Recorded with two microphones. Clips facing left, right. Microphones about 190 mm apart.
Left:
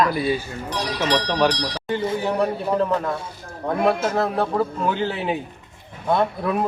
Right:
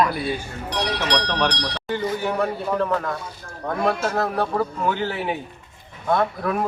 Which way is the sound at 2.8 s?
10° left (ahead or behind).